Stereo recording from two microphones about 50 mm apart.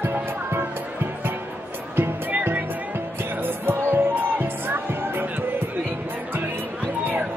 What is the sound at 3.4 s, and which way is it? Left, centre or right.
Music, right.